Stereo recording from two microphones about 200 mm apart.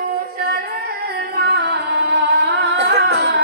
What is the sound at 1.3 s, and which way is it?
Singing, 55° right (ahead or behind).